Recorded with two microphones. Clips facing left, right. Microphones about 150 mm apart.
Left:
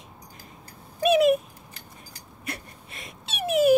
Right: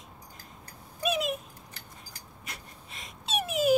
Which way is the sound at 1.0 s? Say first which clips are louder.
Left 11 dB; 65° left (ahead or behind).